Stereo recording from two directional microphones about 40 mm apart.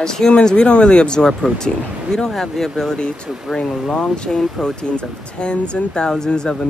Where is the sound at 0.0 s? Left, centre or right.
Centre.